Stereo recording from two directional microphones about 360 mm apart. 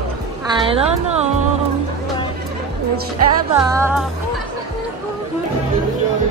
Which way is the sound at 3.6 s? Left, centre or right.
Centre.